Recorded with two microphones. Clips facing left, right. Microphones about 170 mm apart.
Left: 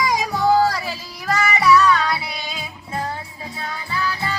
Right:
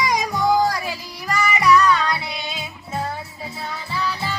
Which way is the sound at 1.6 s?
15° right (ahead or behind).